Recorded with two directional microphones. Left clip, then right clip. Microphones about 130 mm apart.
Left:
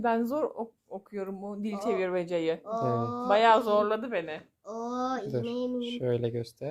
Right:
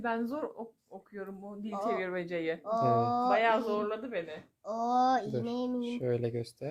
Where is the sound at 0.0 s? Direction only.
55° left (ahead or behind).